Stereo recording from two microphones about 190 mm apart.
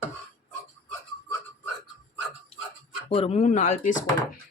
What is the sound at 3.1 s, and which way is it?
Speech, 30° left (ahead or behind).